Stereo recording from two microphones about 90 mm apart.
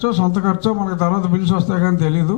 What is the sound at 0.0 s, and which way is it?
A man's voice, 15° left (ahead or behind).